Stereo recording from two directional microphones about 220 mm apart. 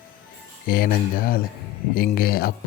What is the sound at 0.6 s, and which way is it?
Speech, 40° left (ahead or behind).